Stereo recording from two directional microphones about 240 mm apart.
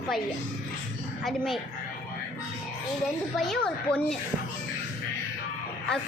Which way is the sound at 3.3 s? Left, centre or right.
Centre.